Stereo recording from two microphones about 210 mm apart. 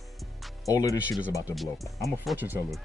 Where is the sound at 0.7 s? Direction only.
15° left (ahead or behind).